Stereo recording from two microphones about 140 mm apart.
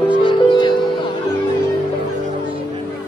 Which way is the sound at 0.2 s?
35° left (ahead or behind).